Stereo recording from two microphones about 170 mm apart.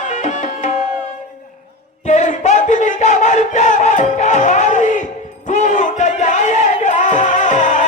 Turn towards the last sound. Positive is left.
turn(degrees=45)  # may be behind; listen again after turning